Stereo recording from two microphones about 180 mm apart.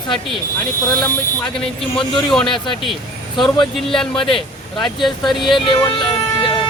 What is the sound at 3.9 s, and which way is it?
Speech, 5° left (ahead or behind).